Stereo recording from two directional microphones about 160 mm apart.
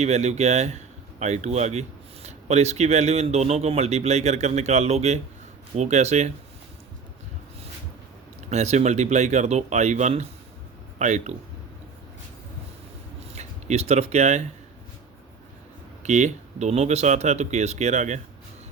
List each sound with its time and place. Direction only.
0.0 s speech: 45° right (ahead or behind)
8.4 s speech: 45° right (ahead or behind)
13.3 s speech: 45° right (ahead or behind)
16.0 s speech: 45° right (ahead or behind)